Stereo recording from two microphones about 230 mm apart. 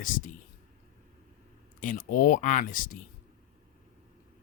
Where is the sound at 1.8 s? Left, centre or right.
Left.